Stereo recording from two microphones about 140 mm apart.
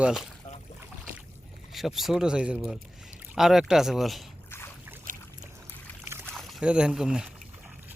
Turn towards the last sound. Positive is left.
turn(degrees=-5)  # may be behind; listen again after turning